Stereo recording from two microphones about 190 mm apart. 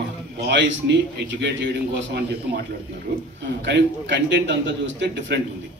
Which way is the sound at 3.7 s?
65° right (ahead or behind).